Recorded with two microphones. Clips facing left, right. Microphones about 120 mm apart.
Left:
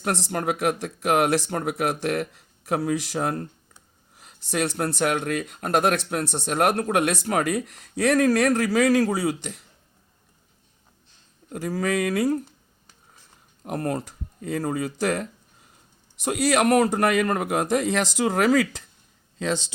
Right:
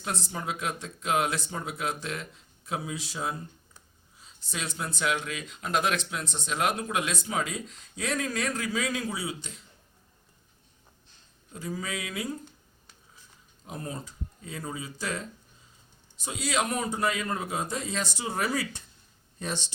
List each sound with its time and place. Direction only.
0.0 s speech: 70° left (ahead or behind)
11.4 s speech: 70° left (ahead or behind)
13.7 s a man's voice: 75° left (ahead or behind); by 19.6 s 90° left